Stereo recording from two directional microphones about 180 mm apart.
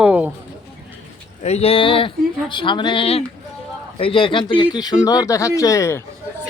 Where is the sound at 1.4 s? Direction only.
35° left (ahead or behind).